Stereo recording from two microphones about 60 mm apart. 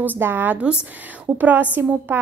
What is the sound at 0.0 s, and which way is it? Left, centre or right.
Speech, right.